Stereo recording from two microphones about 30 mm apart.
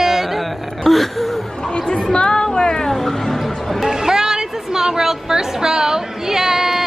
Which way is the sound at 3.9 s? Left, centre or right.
Centre.